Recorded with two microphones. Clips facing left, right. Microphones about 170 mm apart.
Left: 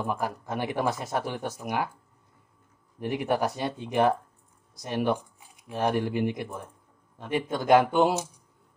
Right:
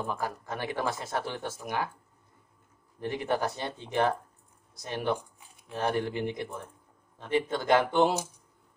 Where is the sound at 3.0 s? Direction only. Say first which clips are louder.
Left 3 dB; 15° left (ahead or behind).